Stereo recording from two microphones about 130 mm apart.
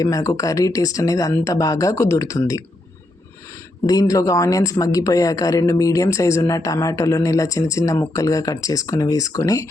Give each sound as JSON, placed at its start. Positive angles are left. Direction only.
{"t": 0.0, "sound": "speech", "side_deg": 25}
{"t": 3.8, "sound": "speech", "side_deg": 25}